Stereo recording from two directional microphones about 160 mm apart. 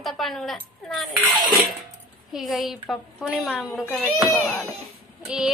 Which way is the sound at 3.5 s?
5° left (ahead or behind).